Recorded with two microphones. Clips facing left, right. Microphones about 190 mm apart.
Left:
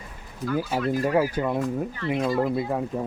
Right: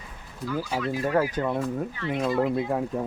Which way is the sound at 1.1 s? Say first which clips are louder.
Left 1 dB; 10° left (ahead or behind).